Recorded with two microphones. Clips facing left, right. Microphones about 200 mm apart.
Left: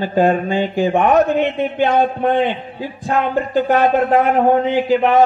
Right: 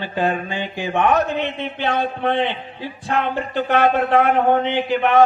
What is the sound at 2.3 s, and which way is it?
A man's voice, 45° left (ahead or behind).